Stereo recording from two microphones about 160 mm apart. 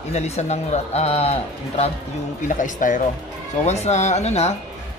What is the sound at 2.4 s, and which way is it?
A man's voice, 55° left (ahead or behind).